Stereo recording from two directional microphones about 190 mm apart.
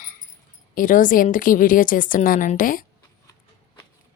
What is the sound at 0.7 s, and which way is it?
A woman's voice, 45° left (ahead or behind).